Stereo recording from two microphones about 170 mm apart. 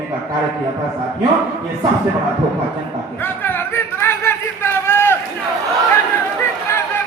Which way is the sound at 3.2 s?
10° left (ahead or behind).